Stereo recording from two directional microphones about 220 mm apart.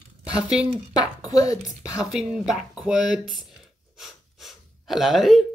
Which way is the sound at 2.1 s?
5° right (ahead or behind).